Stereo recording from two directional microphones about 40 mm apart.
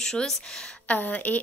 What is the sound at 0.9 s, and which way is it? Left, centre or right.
Speech, left.